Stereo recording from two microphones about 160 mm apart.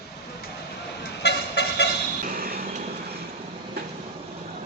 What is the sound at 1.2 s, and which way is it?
Vehicle, 90° left.